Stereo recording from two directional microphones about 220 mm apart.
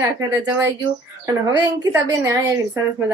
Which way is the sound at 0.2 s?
15° right (ahead or behind).